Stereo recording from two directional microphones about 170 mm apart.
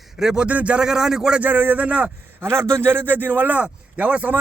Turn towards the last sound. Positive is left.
turn(degrees=-10)  # may be behind; listen again after turning